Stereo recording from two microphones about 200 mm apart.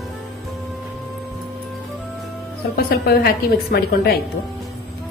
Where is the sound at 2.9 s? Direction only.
50° left (ahead or behind).